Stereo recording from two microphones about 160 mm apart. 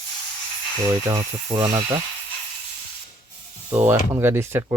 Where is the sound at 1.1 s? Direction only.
20° right (ahead or behind).